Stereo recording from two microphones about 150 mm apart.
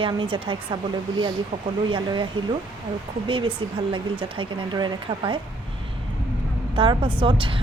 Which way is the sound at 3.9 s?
35° right (ahead or behind).